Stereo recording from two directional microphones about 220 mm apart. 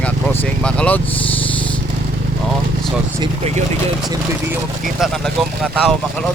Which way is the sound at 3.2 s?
30° right (ahead or behind).